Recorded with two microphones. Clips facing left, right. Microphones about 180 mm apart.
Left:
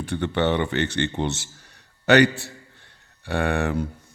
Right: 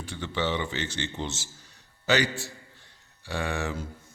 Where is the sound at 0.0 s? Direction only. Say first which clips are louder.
Left 7 dB; 60° left (ahead or behind).